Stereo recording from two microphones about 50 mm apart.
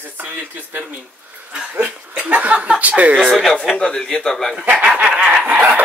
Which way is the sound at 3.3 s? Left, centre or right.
Centre.